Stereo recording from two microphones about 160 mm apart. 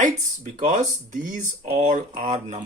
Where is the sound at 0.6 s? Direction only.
55° right (ahead or behind).